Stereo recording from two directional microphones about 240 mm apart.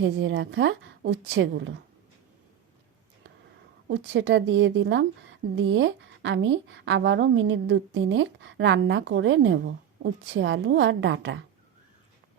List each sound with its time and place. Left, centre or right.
0.0 s a woman's voice: right
3.8 s a woman's voice: right